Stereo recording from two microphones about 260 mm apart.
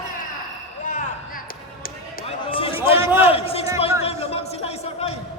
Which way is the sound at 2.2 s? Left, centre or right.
Left.